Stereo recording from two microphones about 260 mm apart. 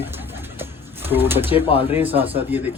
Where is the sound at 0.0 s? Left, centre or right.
Centre.